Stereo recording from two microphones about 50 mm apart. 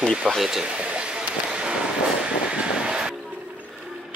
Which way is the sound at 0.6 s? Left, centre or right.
Right.